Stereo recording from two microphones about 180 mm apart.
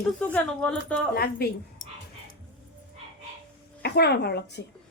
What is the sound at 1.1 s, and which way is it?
Speech, 60° left (ahead or behind).